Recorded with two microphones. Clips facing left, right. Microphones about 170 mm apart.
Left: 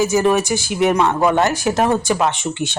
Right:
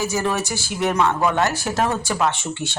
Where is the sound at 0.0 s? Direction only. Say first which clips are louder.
Left 7 dB; 20° left (ahead or behind).